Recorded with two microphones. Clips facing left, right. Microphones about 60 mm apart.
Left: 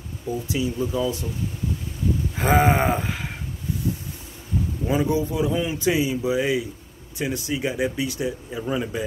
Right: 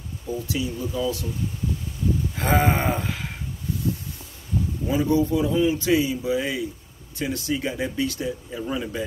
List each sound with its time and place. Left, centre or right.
0.5 s speech: left
2.3 s speech: centre
4.8 s speech: left